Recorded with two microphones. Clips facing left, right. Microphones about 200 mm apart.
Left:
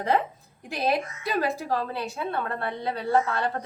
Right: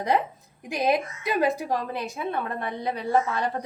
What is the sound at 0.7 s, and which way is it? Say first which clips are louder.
A woman's voice: right 2 dB; 15° right (ahead or behind).